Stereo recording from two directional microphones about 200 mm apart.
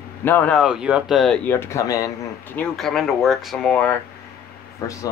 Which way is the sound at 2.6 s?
Centre (ahead or behind).